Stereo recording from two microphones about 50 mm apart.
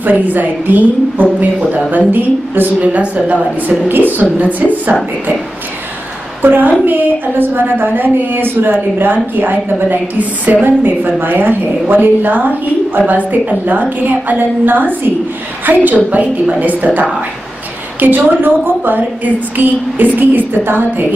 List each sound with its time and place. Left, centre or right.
0.0 s a woman's voice: right
2.8 s a woman's voice: right
6.4 s a woman's voice: right